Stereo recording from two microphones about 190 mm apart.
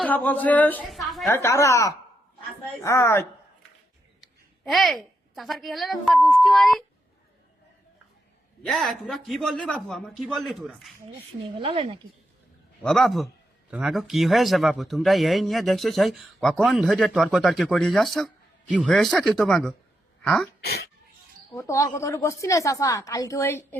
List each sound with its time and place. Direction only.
0.0 s a woman's voice: 10° left (ahead or behind)
1.3 s a woman's voice: 15° left (ahead or behind)
4.2 s a woman's voice: centre (ahead or behind)
8.6 s a man's voice: centre (ahead or behind)
11.4 s speech: 25° right (ahead or behind)
12.8 s a man's voice: 5° left (ahead or behind)
20.6 s speech: 55° left (ahead or behind)
21.5 s a woman's voice: 15° left (ahead or behind)